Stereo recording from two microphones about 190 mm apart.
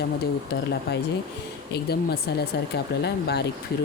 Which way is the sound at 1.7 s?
55° left (ahead or behind).